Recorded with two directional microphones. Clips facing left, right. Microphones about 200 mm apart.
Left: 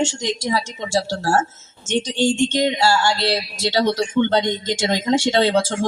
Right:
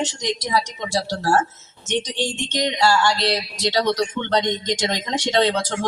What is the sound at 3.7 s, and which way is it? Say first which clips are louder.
A woman's voice: left 3 dB; 25° left (ahead or behind).